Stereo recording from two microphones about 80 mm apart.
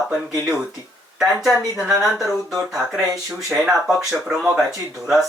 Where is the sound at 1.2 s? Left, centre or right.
Centre.